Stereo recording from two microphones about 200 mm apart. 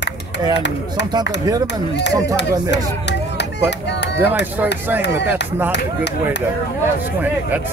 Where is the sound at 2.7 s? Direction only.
60° left (ahead or behind).